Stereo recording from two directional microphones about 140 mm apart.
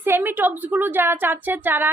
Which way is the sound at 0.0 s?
15° right (ahead or behind).